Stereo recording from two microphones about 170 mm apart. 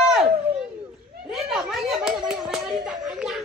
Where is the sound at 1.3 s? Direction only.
Centre (ahead or behind).